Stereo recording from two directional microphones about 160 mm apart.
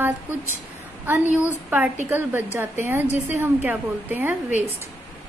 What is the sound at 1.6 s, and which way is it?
A woman's voice, 10° right (ahead or behind).